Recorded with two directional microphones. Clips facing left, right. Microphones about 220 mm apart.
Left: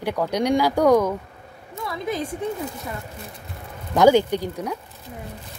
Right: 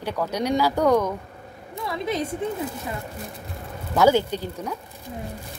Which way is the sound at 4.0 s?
15° left (ahead or behind).